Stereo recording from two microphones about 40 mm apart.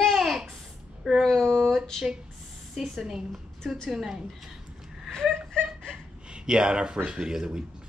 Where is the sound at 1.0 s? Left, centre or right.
Centre.